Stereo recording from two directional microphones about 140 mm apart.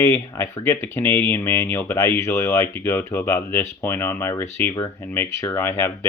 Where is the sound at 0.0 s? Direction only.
20° left (ahead or behind).